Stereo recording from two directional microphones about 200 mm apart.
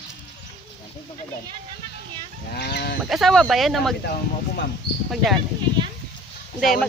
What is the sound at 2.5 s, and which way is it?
Livestock, 55° left (ahead or behind).